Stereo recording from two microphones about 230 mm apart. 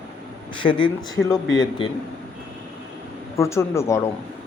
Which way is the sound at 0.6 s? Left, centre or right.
Left.